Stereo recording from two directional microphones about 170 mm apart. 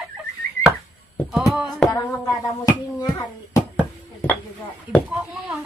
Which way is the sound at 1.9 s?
20° left (ahead or behind).